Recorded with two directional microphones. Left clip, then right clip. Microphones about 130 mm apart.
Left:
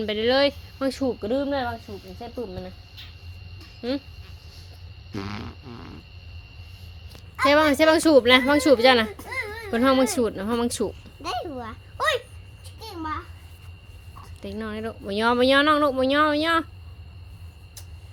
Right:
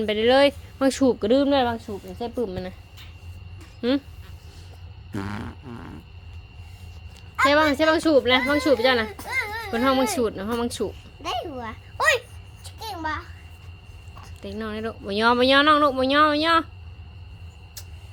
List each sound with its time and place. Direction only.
0.0 s speech: 10° right (ahead or behind)
0.9 s speech: 50° right (ahead or behind)
2.2 s a sound: 30° right (ahead or behind)
3.8 s speech: 35° right (ahead or behind)
5.1 s a sound: 30° right (ahead or behind)
7.4 s speech: 20° left (ahead or behind); by 9.0 s 40° left (ahead or behind)
9.1 s music: 25° right (ahead or behind)
9.7 s speech: 25° left (ahead or behind)
11.9 s speech: centre (ahead or behind)
14.4 s speech: 10° left (ahead or behind)